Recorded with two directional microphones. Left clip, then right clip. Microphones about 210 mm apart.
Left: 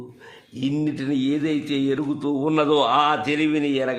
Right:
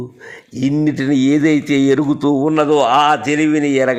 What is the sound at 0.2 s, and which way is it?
A man's voice, 25° right (ahead or behind).